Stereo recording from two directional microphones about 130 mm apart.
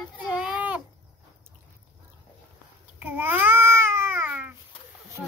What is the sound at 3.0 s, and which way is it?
Babbling, 15° right (ahead or behind).